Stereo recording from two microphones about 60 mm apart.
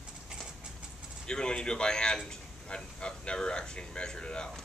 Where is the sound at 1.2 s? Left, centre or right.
Centre.